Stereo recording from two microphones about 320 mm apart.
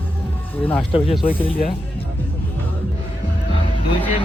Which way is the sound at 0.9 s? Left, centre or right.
Centre.